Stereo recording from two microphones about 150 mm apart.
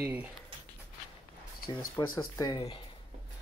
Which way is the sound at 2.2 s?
30° left (ahead or behind).